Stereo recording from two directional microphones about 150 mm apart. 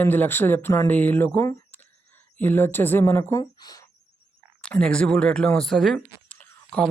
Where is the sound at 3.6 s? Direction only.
25° left (ahead or behind).